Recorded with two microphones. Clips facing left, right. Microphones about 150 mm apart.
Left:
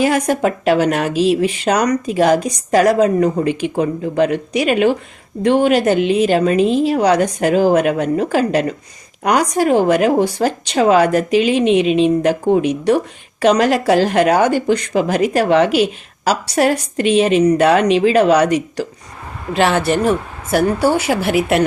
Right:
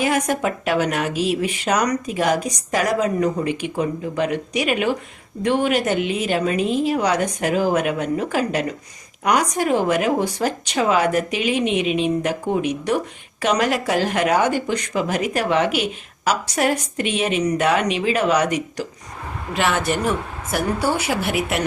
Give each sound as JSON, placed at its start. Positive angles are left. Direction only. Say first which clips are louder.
{"t": 0.0, "sound": "speech", "louder": "left 5 dB", "side_deg": 30}
{"t": 21.1, "sound": "speech", "louder": "left 5 dB", "side_deg": 45}